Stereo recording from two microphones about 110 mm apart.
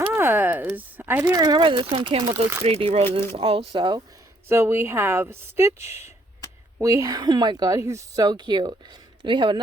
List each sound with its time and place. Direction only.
0.2 s a sound: 20° right (ahead or behind)
1.4 s speech: 35° right (ahead or behind)
1.6 s speech: 50° right (ahead or behind)
2.3 s speech: 25° right (ahead or behind)
2.6 s speech: 65° right (ahead or behind); by 4.0 s 45° right (ahead or behind)
4.4 s speech: 20° right (ahead or behind); by 9.6 s 50° right (ahead or behind)